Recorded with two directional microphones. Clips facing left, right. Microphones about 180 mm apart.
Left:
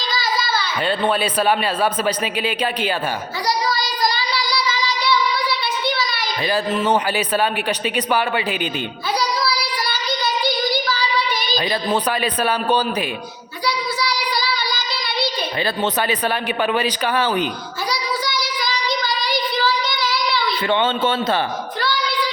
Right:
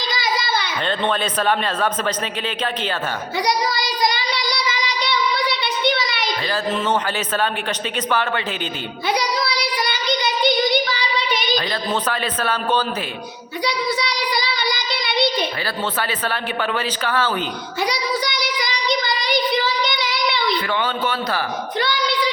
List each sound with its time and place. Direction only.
0.1 s a sound: 15° right (ahead or behind)
0.9 s a man's voice: 10° left (ahead or behind)
3.4 s child singing: 20° right (ahead or behind)
6.5 s a man's voice: 10° left (ahead or behind)
9.1 s child singing: 20° right (ahead or behind)
11.5 s a man's voice: 15° left (ahead or behind)
13.7 s child singing: 20° right (ahead or behind)
15.6 s a man's voice: 20° left (ahead or behind)
17.8 s child singing: 20° right (ahead or behind)
20.7 s speech: 25° left (ahead or behind)
21.8 s child singing: 20° right (ahead or behind)